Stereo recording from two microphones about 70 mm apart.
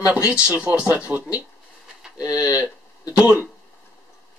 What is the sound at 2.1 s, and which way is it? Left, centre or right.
Speech, left.